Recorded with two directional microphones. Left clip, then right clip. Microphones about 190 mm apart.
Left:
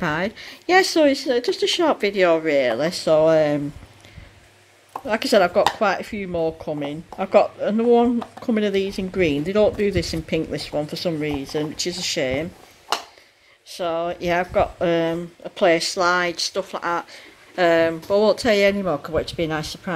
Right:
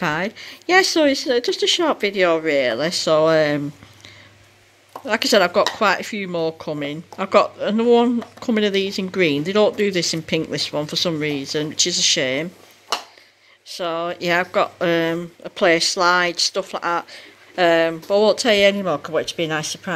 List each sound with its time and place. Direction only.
0.0 s speech: 5° right (ahead or behind)
5.0 s speech: 5° right (ahead or behind)
13.7 s speech: 5° right (ahead or behind)